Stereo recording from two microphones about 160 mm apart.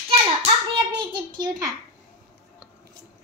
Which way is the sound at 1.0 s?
30° right (ahead or behind).